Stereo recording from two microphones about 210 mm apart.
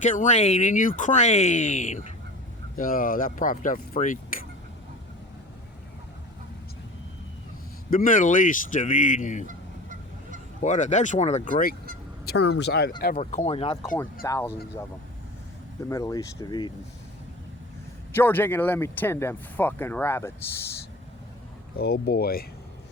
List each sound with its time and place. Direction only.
0.0 s speech: 35° left (ahead or behind)
7.9 s speech: 40° left (ahead or behind)
9.5 s goose: 40° right (ahead or behind)
10.6 s speech: 35° left (ahead or behind)
12.2 s speech: 50° left (ahead or behind)
13.1 s speech: 30° left (ahead or behind)
13.8 s speech: 5° left (ahead or behind)
15.9 s speech: 15° left (ahead or behind)
18.1 s speech: 10° left (ahead or behind)
21.8 s speech: 50° left (ahead or behind)